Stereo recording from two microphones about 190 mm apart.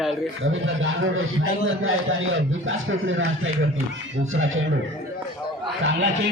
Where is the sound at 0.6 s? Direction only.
90° right.